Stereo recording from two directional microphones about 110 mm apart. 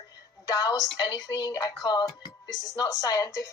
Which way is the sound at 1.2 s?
35° left (ahead or behind).